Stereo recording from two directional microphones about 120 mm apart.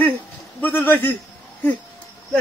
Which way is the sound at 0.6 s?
15° left (ahead or behind).